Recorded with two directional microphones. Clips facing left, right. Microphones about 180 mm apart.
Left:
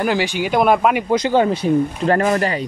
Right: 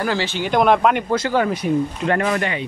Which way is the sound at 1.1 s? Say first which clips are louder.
Left 3 dB; 20° left (ahead or behind).